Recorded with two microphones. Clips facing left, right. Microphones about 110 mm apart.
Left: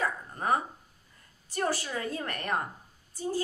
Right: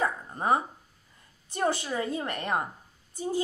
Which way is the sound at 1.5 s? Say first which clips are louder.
Right 3 dB; 20° right (ahead or behind).